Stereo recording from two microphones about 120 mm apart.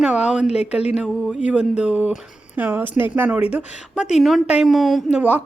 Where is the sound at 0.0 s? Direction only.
10° right (ahead or behind).